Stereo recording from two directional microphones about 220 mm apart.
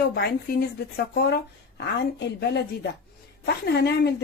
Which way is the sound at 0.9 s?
45° left (ahead or behind).